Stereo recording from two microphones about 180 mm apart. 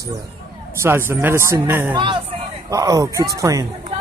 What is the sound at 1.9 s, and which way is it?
Speech, 25° right (ahead or behind).